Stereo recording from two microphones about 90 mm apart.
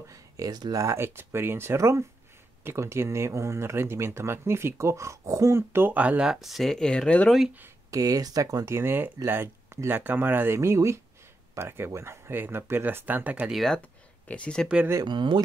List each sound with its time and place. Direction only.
0.1 s speech: 45° right (ahead or behind)
0.8 s speech: 30° right (ahead or behind)
6.3 s speech: centre (ahead or behind)
7.9 s speech: 40° right (ahead or behind)
8.7 s speech: 25° right (ahead or behind)
13.5 s speech: centre (ahead or behind)
14.2 s speech: 15° left (ahead or behind)
15.0 s speech: 60° right (ahead or behind)